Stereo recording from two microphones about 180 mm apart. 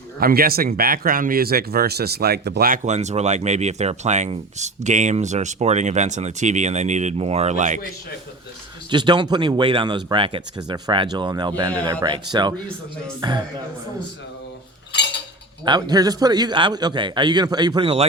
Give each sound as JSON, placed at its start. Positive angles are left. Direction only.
{"t": 0.2, "sound": "speech", "side_deg": -55}
{"t": 8.9, "sound": "a man's voice", "side_deg": -25}
{"t": 15.6, "sound": "a man's voice", "side_deg": -25}